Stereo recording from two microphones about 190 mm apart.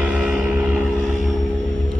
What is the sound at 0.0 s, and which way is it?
Vehicle, 5° right (ahead or behind).